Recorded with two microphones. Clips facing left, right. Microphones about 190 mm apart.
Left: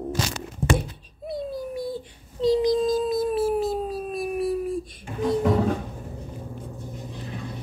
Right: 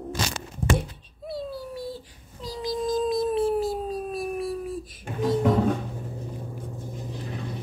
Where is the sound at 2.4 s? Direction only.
20° left (ahead or behind).